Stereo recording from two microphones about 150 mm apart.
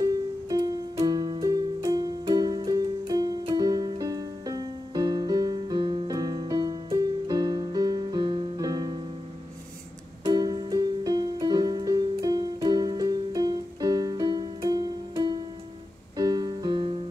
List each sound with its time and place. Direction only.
0.0 s music: 25° right (ahead or behind)
10.2 s music: 25° right (ahead or behind)